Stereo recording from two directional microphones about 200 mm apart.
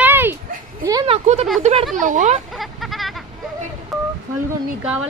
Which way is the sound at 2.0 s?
40° right (ahead or behind).